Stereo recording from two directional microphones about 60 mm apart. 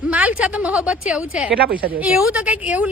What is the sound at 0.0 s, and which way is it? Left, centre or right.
A woman's voice, right.